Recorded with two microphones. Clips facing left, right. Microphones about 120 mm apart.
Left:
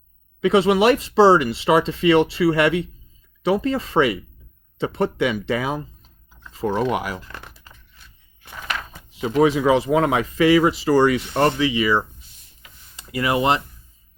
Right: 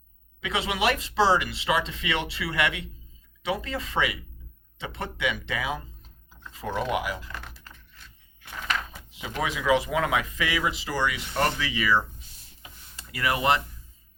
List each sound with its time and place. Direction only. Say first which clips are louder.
0.4 s speech: left 11 dB; 40° left (ahead or behind)
7.4 s a sound: left 1 dB; 10° left (ahead or behind)
9.2 s speech: left 10 dB; 35° left (ahead or behind)
11.3 s speech: left 5 dB; 25° left (ahead or behind)